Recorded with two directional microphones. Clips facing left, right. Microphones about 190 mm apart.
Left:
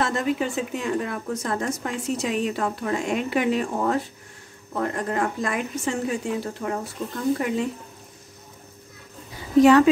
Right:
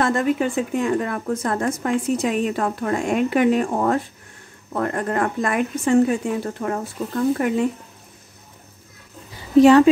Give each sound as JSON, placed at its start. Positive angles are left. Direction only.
{"t": 0.0, "sound": "a woman's voice", "side_deg": -55}
{"t": 9.6, "sound": "speech", "side_deg": -30}